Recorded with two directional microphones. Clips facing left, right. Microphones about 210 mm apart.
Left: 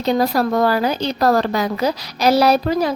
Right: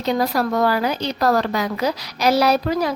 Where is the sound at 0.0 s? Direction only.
30° left (ahead or behind).